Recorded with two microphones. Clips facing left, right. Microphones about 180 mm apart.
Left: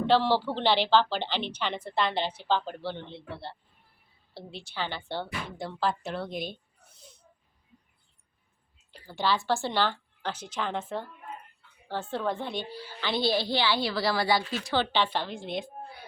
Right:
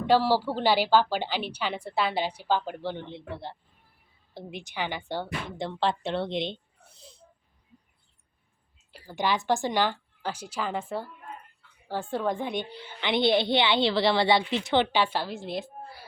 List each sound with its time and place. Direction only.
0.0 s a woman's voice: 10° right (ahead or behind); by 7.2 s 30° right (ahead or behind)
8.9 s a woman's voice: 10° right (ahead or behind)
14.9 s a woman's voice: 10° right (ahead or behind)